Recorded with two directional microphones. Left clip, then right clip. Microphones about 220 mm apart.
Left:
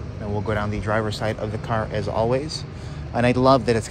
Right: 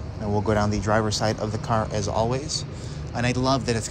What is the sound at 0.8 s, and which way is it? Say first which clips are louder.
Speech: right 1 dB; 15° right (ahead or behind).